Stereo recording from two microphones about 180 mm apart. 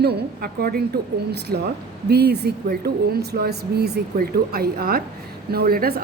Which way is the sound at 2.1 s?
65° right (ahead or behind).